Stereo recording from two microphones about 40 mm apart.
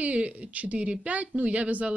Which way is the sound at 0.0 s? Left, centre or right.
Right.